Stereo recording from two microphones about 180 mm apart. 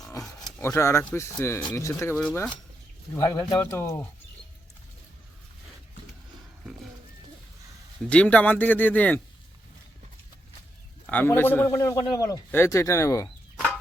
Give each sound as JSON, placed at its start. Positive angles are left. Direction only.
{"t": 0.6, "sound": "a man's voice", "side_deg": 15}
{"t": 3.2, "sound": "a man's voice", "side_deg": 20}
{"t": 8.1, "sound": "a man's voice", "side_deg": 5}
{"t": 11.0, "sound": "a man's voice", "side_deg": 10}